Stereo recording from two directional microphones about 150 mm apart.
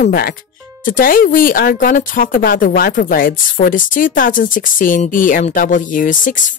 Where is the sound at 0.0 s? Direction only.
90° left.